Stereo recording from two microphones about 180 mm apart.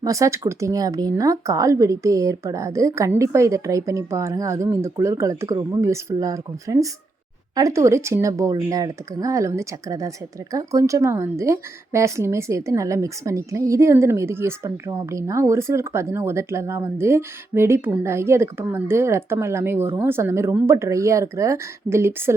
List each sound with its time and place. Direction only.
0.0 s a woman's voice: 15° right (ahead or behind)